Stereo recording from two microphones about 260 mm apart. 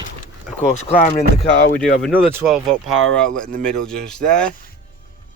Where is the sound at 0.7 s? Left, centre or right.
Left.